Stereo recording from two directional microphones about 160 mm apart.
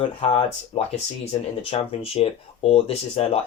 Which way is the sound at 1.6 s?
35° left (ahead or behind).